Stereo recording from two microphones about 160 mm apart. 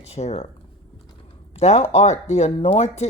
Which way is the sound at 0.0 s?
45° left (ahead or behind).